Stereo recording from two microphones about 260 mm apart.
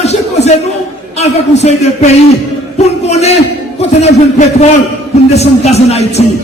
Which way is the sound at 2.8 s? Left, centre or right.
Left.